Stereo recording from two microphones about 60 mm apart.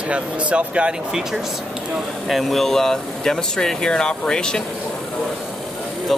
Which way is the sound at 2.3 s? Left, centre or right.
Centre.